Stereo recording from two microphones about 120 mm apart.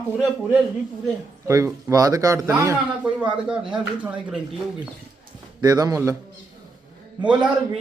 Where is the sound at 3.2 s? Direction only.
10° right (ahead or behind).